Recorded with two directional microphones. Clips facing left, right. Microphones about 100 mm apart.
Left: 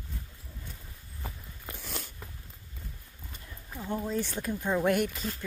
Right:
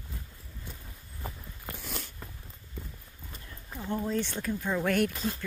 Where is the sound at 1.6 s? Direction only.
Centre (ahead or behind).